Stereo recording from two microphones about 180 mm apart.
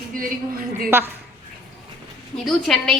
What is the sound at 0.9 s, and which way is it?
Speech, 15° right (ahead or behind).